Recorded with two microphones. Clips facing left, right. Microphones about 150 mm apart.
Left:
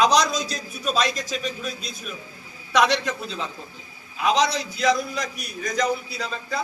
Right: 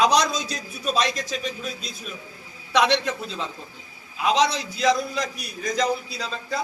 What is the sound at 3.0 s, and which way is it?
Speech, 20° right (ahead or behind).